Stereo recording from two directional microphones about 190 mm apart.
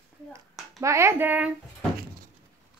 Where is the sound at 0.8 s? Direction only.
15° right (ahead or behind).